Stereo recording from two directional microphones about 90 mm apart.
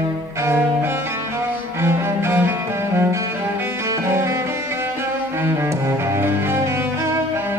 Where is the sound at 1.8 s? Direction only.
25° right (ahead or behind).